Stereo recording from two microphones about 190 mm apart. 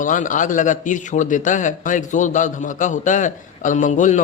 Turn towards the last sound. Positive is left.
turn(degrees=40)  # may be behind; listen again after turning